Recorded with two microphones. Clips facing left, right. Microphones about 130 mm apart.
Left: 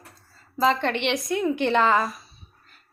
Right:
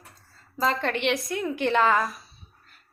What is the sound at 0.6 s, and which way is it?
A woman's voice, centre (ahead or behind).